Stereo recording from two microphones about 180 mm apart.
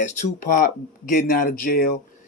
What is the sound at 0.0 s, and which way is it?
Speech, 45° left (ahead or behind).